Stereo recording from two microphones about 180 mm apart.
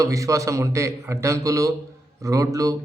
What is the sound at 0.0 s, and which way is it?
A man's voice, 15° right (ahead or behind).